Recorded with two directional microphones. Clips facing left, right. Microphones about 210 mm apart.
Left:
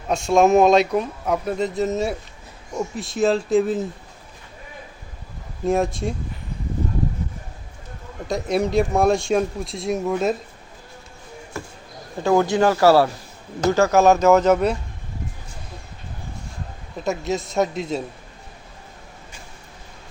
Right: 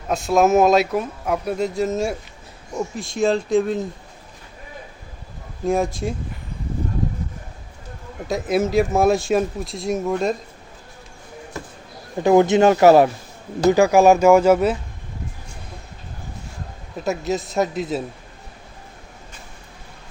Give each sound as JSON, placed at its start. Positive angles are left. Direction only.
{"t": 0.1, "sound": "speech", "side_deg": -5}
{"t": 5.6, "sound": "speech", "side_deg": 0}
{"t": 8.3, "sound": "speech", "side_deg": 0}
{"t": 12.2, "sound": "speech", "side_deg": -20}
{"t": 17.0, "sound": "speech", "side_deg": 0}